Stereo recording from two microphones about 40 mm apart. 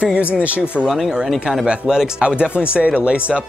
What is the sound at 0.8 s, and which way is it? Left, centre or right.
Speech, centre.